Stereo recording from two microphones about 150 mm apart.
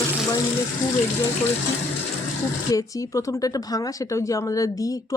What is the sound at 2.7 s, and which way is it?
Speech, 20° left (ahead or behind).